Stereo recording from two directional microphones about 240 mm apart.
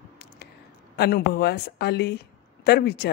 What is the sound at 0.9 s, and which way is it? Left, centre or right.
Speech, left.